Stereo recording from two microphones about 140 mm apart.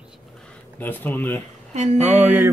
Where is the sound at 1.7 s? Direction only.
50° right (ahead or behind).